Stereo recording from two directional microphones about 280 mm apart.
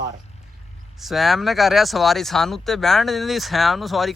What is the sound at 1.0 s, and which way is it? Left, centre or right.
Speech, centre.